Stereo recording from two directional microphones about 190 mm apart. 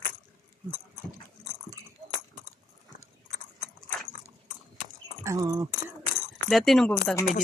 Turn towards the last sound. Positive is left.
turn(degrees=0)  # may be behind; listen again after turning